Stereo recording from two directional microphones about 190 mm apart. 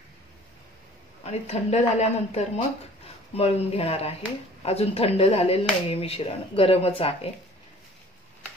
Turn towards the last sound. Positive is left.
turn(degrees=30)  # may be behind; listen again after turning